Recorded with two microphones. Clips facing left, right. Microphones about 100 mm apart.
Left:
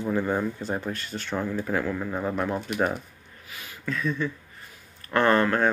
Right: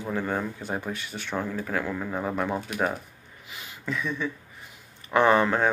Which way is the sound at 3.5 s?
20° right (ahead or behind).